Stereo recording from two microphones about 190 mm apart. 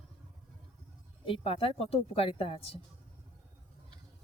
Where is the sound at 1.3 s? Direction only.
30° left (ahead or behind).